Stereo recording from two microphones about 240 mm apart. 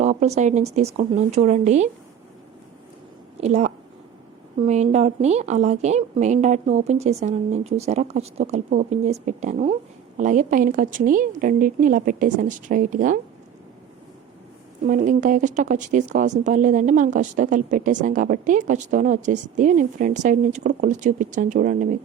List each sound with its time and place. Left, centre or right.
0.0 s a woman's voice: right
3.4 s a woman's voice: right
14.8 s speech: right